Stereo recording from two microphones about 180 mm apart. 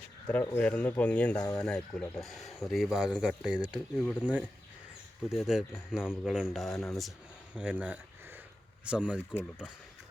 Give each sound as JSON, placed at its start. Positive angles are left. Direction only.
{"t": 0.3, "sound": "speech", "side_deg": 10}
{"t": 1.6, "sound": "speech", "side_deg": 5}